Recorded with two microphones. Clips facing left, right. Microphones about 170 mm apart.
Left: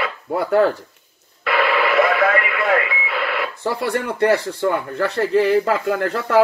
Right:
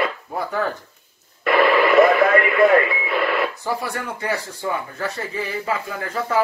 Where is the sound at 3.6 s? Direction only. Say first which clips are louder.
Left 4 dB; 65° left (ahead or behind).